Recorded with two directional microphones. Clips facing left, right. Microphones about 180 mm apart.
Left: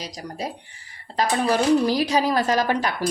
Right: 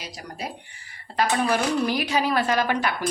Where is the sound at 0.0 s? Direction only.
35° left (ahead or behind).